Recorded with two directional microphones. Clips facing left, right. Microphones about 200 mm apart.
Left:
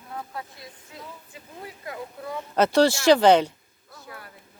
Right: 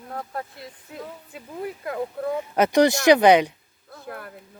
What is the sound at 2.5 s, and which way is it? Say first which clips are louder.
Speech: right 1 dB; 15° right (ahead or behind).